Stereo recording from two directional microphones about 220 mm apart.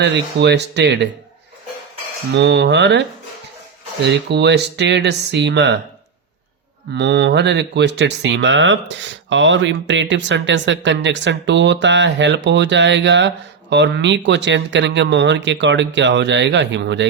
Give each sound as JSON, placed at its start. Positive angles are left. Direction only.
{"t": 0.0, "sound": "speech", "side_deg": -50}
{"t": 2.3, "sound": "speech", "side_deg": -50}
{"t": 4.3, "sound": "speech", "side_deg": -50}
{"t": 6.9, "sound": "speech", "side_deg": -50}